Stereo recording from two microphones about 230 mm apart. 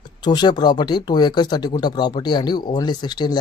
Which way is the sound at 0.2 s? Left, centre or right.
Centre.